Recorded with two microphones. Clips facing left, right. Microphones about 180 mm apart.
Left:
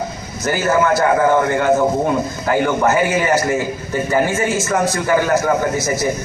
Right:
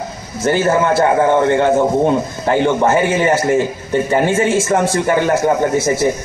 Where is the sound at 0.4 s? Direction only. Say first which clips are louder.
Right 2 dB; 30° right (ahead or behind).